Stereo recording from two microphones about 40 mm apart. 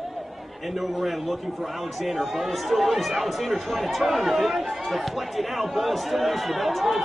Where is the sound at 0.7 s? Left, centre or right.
Centre.